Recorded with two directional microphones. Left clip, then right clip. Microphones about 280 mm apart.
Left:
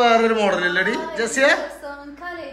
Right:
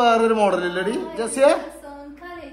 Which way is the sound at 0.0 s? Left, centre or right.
Centre.